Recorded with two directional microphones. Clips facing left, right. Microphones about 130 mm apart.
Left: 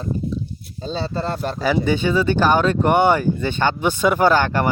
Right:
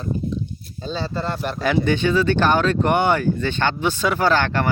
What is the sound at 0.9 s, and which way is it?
Speech, 35° left (ahead or behind).